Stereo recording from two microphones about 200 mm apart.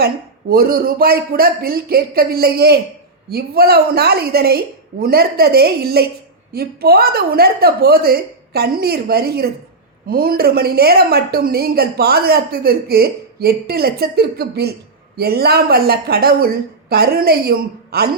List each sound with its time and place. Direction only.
0.0 s a woman's voice: 50° right (ahead or behind)